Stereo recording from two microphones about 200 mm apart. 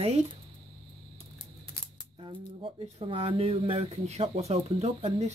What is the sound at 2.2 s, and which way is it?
Speech, 25° right (ahead or behind).